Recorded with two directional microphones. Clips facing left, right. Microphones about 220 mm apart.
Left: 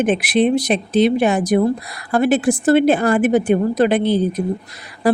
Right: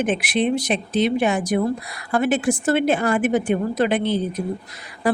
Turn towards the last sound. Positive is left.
turn(degrees=35)  # may be behind; listen again after turning